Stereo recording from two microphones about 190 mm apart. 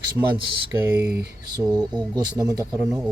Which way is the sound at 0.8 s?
10° right (ahead or behind).